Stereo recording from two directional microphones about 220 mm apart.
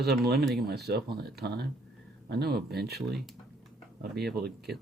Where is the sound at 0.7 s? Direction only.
45° right (ahead or behind).